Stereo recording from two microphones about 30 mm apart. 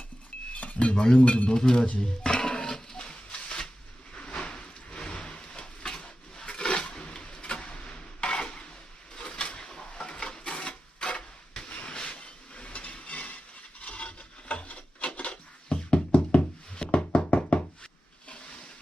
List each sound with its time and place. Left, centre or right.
0.5 s chink: left
0.8 s speech: left
1.2 s speech: left
1.5 s speech: left
2.0 s music: left
3.0 s a sound: left
4.2 s a sound: left
12.5 s a sound: left
13.7 s wood: left
15.7 s knock: left
17.5 s knock: left